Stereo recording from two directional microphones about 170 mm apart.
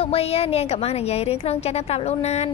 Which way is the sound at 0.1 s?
35° left (ahead or behind).